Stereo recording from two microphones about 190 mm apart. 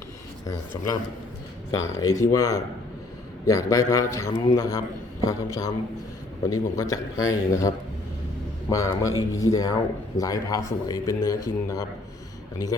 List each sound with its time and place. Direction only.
0.4 s speech: 15° left (ahead or behind)
8.7 s speech: 15° left (ahead or behind)
9.1 s speech: 90° left
9.5 s speech: 15° left (ahead or behind)